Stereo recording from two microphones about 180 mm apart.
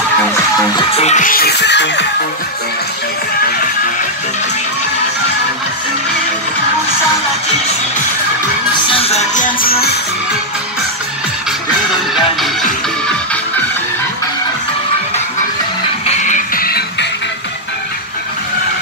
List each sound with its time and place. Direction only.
0.9 s music: 40° left (ahead or behind); by 2.0 s 75° left (ahead or behind)
8.8 s music: 30° left (ahead or behind); by 9.9 s 55° left (ahead or behind)
16.2 s music: 45° left (ahead or behind)